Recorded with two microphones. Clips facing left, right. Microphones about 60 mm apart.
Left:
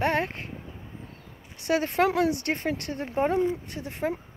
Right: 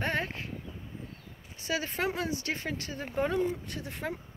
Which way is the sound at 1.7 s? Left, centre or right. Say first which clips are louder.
Left 8 dB; left.